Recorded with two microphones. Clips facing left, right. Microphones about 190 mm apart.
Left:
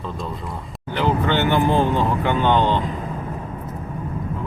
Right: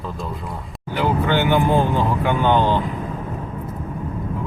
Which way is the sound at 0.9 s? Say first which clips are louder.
Even; 10° right (ahead or behind).